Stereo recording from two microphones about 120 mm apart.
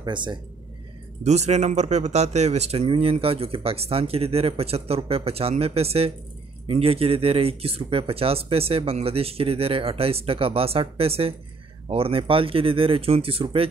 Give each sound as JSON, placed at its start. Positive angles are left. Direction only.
{"t": 0.0, "sound": "speech", "side_deg": -40}
{"t": 1.2, "sound": "speech", "side_deg": -70}